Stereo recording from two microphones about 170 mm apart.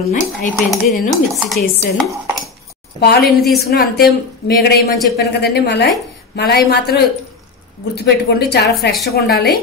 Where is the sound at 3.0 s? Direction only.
70° left (ahead or behind).